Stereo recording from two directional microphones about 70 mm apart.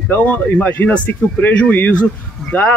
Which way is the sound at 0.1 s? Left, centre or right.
Left.